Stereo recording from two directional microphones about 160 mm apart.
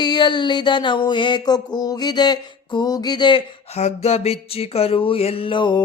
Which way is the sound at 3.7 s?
40° left (ahead or behind).